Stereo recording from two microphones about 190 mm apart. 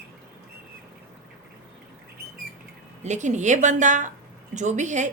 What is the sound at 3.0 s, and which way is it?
A woman's voice, 40° right (ahead or behind).